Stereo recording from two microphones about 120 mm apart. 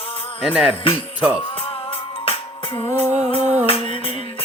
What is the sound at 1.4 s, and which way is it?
Music, 45° left (ahead or behind).